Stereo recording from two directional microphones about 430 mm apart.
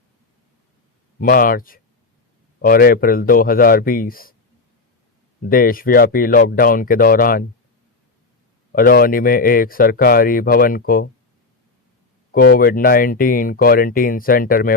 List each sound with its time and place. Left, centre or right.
1.2 s speech: centre
5.4 s speech: centre
8.7 s speech: centre
12.3 s speech: centre